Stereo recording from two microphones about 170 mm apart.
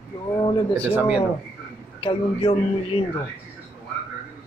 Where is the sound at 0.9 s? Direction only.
5° right (ahead or behind).